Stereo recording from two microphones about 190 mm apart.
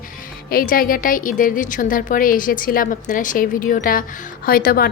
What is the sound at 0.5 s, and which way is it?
A woman's voice, 50° left (ahead or behind).